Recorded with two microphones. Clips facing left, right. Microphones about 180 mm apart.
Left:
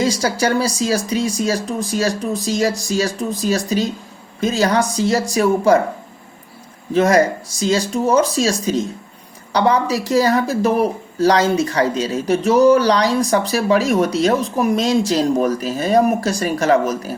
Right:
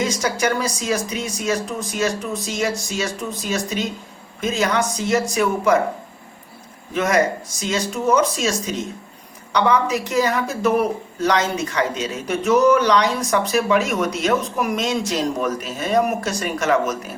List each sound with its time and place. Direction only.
0.0 s speech: 30° left (ahead or behind)
6.9 s speech: 30° left (ahead or behind)